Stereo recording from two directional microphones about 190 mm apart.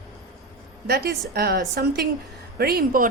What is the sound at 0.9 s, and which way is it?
A woman's voice, 55° right (ahead or behind).